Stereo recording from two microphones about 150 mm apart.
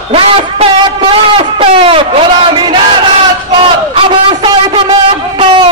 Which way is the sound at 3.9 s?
30° right (ahead or behind).